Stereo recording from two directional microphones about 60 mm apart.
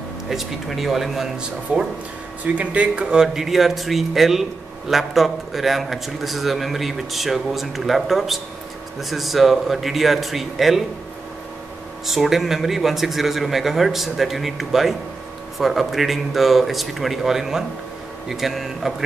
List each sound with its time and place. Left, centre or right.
0.3 s speech: centre
1.7 s speech: centre
12.1 s speech: centre